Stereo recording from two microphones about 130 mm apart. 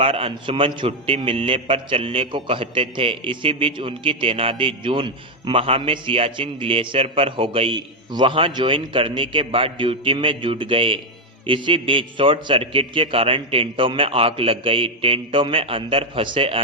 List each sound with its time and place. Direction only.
0.0 s a man's voice: 45° right (ahead or behind)